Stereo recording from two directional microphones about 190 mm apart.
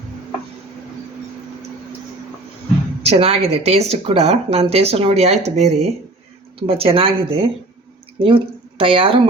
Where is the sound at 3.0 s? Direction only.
30° right (ahead or behind).